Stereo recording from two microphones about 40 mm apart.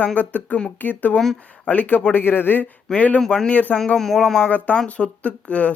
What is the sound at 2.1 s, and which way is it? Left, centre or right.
Speech, left.